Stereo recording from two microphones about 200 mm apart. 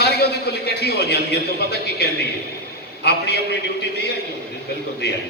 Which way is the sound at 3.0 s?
55° left (ahead or behind).